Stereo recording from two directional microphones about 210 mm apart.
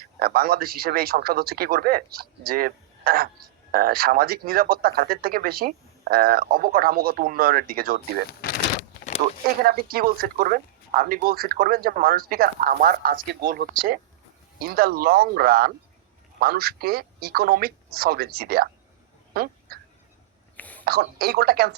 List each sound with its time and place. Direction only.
0.0 s speech: 45° right (ahead or behind)
8.3 s speech: 45° left (ahead or behind)
9.6 s speech: 45° right (ahead or behind)
19.3 s duck: 45° right (ahead or behind)
20.6 s whispering: 10° left (ahead or behind)
20.8 s speech: 45° right (ahead or behind)